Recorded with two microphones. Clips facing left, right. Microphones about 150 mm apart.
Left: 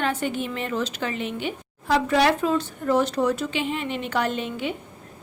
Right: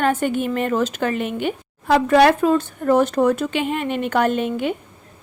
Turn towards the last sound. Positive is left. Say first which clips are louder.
# right 7 dB
turn(degrees=-50)  # may be behind; listen again after turning